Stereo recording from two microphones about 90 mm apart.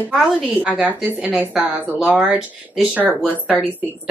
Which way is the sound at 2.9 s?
20° right (ahead or behind).